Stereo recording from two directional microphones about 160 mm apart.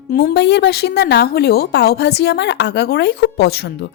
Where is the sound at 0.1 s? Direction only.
90° left.